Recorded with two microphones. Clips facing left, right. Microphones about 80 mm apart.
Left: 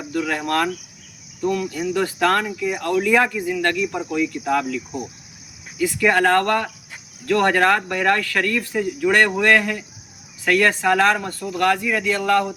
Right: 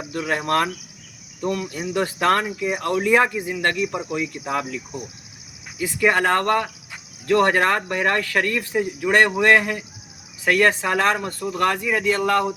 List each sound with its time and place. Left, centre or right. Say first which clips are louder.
0.1 s speech: even; right
5.8 s a man's voice: left 2 dB; right